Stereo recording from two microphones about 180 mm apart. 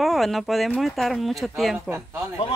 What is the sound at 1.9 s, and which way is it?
Speech, 15° right (ahead or behind).